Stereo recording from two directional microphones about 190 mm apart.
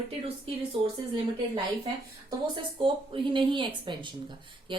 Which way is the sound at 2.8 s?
25° right (ahead or behind).